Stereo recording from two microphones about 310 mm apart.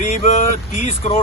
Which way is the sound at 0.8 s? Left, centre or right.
Left.